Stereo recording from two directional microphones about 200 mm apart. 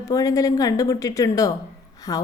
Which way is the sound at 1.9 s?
20° left (ahead or behind).